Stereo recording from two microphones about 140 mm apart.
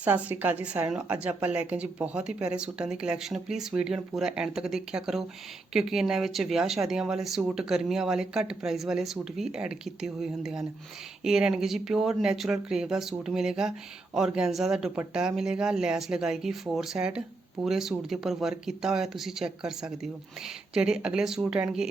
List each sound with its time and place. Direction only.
0.0 s a woman's voice: 10° right (ahead or behind)